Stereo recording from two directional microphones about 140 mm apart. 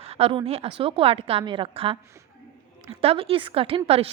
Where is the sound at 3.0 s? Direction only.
40° right (ahead or behind).